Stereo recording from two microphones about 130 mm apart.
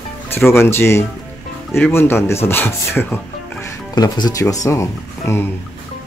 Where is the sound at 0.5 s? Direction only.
20° left (ahead or behind).